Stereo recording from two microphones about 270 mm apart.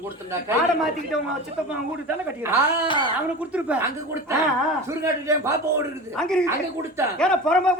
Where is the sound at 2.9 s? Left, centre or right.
Centre.